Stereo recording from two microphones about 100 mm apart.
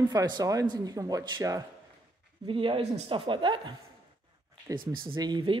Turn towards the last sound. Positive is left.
turn(degrees=-50)  # may be behind; listen again after turning